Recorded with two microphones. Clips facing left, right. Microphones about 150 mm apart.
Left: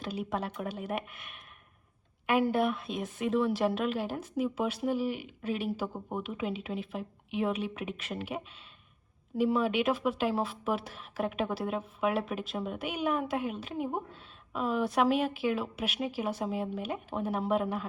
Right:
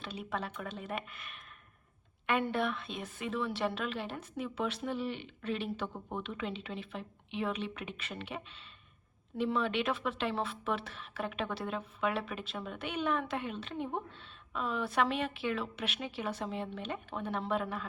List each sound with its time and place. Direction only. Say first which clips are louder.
0.0 s a woman's voice: left 5 dB; centre (ahead or behind)